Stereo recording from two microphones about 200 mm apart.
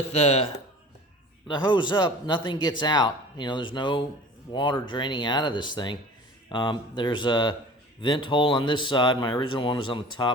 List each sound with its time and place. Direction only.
0.1 s speech: 30° left (ahead or behind)